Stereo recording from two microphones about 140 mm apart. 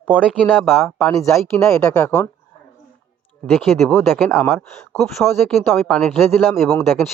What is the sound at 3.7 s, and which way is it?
Speech, 15° left (ahead or behind).